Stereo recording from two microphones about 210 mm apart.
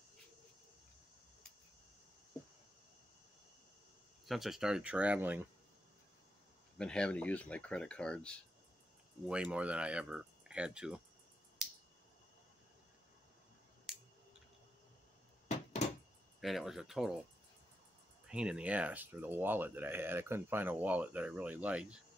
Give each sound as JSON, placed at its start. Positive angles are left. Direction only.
{"t": 4.3, "sound": "speech", "side_deg": 0}
{"t": 6.8, "sound": "speech", "side_deg": 5}
{"t": 11.6, "sound": "finger snapping", "side_deg": 0}
{"t": 13.9, "sound": "scissors", "side_deg": 0}
{"t": 16.3, "sound": "speech", "side_deg": 0}
{"t": 18.2, "sound": "speech", "side_deg": -5}